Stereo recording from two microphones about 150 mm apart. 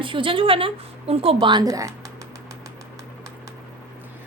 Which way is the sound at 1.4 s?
25° right (ahead or behind).